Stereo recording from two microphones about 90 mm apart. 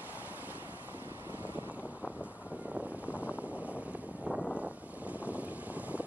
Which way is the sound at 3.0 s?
15° right (ahead or behind).